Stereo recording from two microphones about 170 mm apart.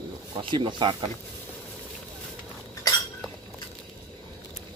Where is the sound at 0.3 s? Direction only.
30° right (ahead or behind).